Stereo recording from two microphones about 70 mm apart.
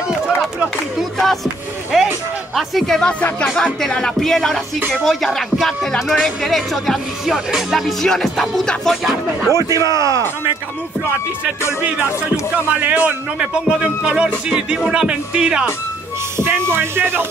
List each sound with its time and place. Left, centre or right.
1.1 s speech: centre
2.5 s music: centre
5.0 s speech: centre
9.5 s a man's voice: right
11.8 s speech: right
14.9 s music: centre
16.3 s speech: right